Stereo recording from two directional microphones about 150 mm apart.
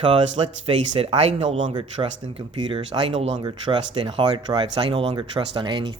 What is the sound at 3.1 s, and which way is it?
Speech, 45° right (ahead or behind).